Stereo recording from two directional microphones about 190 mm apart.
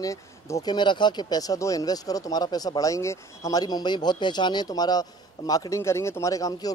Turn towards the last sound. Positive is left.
turn(degrees=20)  # may be behind; listen again after turning